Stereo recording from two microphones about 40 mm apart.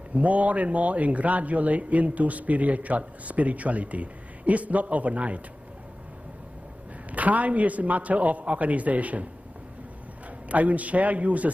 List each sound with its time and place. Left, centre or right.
0.1 s speech: right
7.1 s speech: right
10.5 s speech: right